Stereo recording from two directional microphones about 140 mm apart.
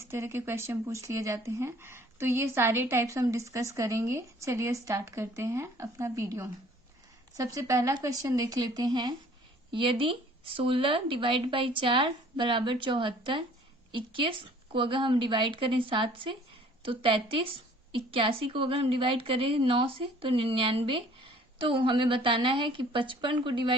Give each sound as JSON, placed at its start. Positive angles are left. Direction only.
{"t": 0.0, "sound": "speech", "side_deg": -20}